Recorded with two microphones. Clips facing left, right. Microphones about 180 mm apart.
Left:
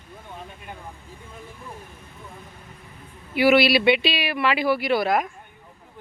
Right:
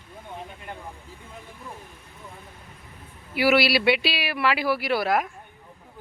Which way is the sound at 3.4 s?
5° right (ahead or behind).